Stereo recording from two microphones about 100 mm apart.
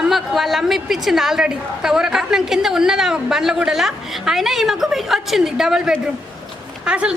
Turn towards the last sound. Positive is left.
turn(degrees=-10)  # may be behind; listen again after turning